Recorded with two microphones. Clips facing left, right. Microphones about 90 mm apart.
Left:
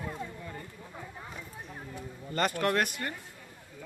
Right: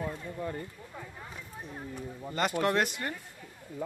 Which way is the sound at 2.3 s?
15° right (ahead or behind).